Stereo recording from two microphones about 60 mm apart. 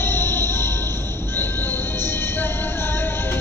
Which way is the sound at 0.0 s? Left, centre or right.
Left.